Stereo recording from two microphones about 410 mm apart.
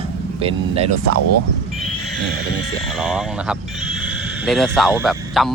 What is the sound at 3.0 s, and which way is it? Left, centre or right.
Speech, centre.